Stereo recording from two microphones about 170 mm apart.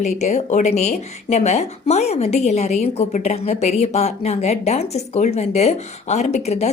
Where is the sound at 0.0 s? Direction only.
40° left (ahead or behind).